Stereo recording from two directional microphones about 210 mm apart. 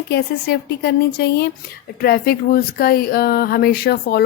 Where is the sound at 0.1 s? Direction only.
50° left (ahead or behind).